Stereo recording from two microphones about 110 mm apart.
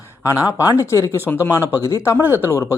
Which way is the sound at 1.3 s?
15° left (ahead or behind).